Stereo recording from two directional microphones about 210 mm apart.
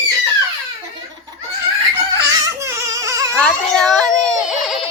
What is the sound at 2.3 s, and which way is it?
Baby cry, 15° right (ahead or behind).